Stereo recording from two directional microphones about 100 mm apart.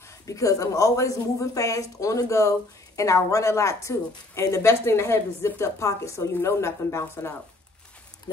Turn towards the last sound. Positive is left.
turn(degrees=25)  # may be behind; listen again after turning